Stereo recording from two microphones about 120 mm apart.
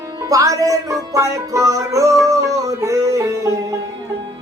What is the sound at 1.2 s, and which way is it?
Music, 25° right (ahead or behind).